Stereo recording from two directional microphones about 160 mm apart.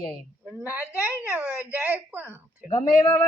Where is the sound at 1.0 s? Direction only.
5° right (ahead or behind).